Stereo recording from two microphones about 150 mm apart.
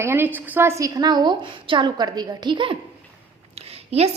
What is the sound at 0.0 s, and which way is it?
A woman's voice, 15° right (ahead or behind).